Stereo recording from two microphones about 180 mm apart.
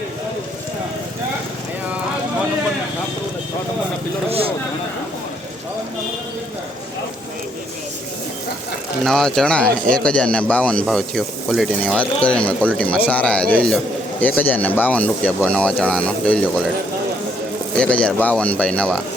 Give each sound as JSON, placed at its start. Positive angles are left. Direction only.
{"t": 4.3, "sound": "speech", "side_deg": -30}
{"t": 9.0, "sound": "speech", "side_deg": 5}
{"t": 17.7, "sound": "speech", "side_deg": 5}